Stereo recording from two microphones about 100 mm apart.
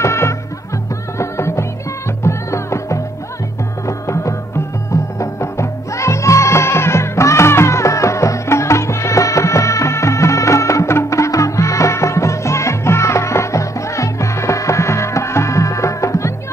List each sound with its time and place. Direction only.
0.0 s music: 30° left (ahead or behind)